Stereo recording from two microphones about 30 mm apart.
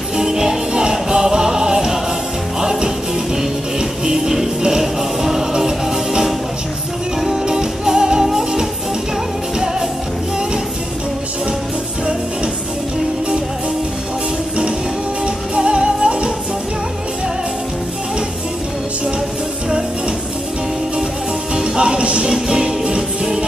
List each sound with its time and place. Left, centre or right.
0.2 s music: right
4.0 s music: centre
7.4 s music: right
15.2 s music: right
21.7 s music: right